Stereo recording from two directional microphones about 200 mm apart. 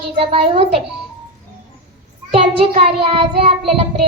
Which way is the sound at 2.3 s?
30° right (ahead or behind).